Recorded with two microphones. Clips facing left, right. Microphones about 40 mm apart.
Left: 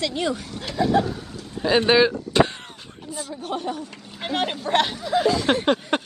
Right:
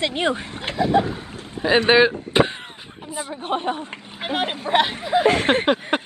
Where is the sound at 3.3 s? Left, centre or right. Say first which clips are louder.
Right 4 dB; right.